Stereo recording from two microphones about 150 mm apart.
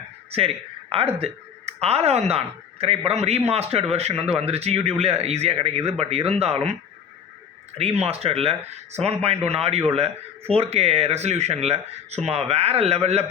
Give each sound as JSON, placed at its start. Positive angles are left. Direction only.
{"t": 0.3, "sound": "speech", "side_deg": -40}
{"t": 7.8, "sound": "speech", "side_deg": -40}